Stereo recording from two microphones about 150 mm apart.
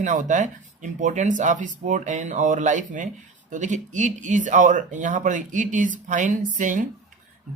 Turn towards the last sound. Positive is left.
turn(degrees=-60)  # may be behind; listen again after turning